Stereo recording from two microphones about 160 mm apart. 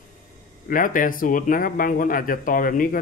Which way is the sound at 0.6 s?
60° left (ahead or behind).